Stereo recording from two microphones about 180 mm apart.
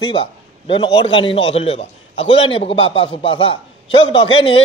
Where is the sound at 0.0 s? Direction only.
30° left (ahead or behind).